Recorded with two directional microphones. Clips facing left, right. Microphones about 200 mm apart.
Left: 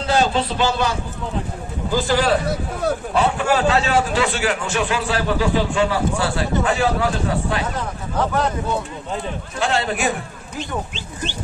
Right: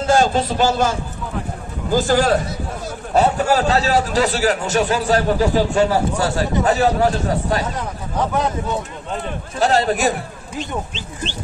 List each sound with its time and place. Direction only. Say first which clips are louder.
0.0 s a man's voice: right 3 dB; 45° right (ahead or behind)
9.6 s a man's voice: right 5 dB; 40° right (ahead or behind)